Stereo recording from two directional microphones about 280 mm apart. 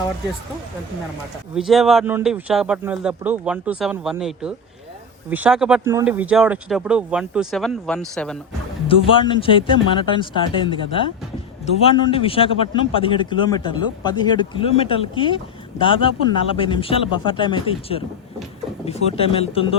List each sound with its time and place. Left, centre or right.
1.5 s speech: centre
8.9 s a man's voice: centre
11.8 s a man's voice: centre